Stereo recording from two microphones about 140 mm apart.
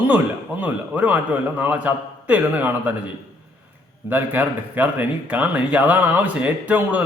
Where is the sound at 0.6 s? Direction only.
10° right (ahead or behind).